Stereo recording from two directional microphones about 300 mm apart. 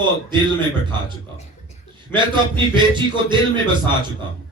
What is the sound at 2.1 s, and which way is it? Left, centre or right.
Speech, centre.